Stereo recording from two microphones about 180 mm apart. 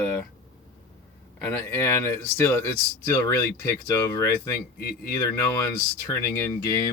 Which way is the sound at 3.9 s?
15° left (ahead or behind).